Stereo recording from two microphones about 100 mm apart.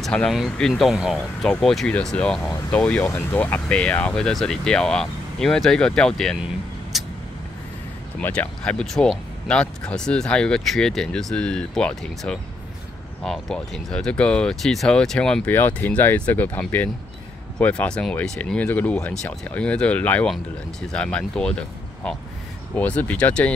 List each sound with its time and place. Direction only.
0.0 s speech: 5° left (ahead or behind)
6.9 s vehicle: centre (ahead or behind)
8.2 s speech: 15° left (ahead or behind)
15.4 s speech: 20° left (ahead or behind)